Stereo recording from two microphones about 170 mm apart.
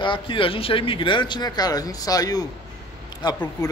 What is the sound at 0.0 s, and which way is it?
Speech, 30° left (ahead or behind).